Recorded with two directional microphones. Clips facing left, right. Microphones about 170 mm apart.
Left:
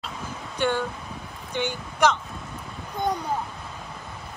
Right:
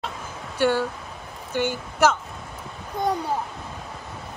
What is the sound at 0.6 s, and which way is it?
A woman's voice, 5° right (ahead or behind).